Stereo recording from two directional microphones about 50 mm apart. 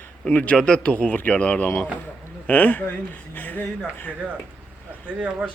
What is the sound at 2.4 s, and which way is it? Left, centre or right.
Speech, left.